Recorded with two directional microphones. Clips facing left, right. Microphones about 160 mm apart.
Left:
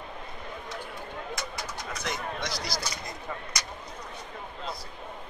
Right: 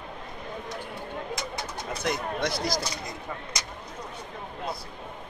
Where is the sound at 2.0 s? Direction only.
55° right (ahead or behind).